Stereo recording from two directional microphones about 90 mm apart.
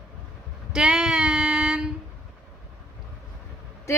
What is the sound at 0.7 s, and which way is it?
Female singing, 10° right (ahead or behind).